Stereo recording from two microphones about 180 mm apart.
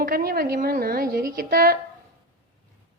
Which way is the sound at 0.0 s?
55° right (ahead or behind).